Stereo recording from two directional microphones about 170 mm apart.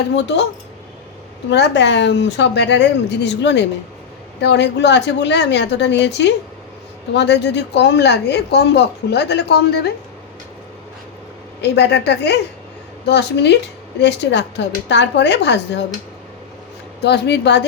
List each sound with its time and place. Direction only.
0.2 s a woman's voice: 90° left
1.5 s a woman's voice: 90° left
11.6 s a woman's voice: 80° left
17.0 s speech: 80° left